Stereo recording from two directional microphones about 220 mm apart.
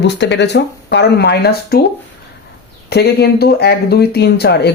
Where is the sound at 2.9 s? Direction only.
45° left (ahead or behind).